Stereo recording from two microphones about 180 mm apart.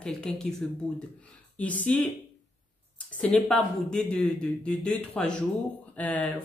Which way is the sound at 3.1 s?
5° left (ahead or behind).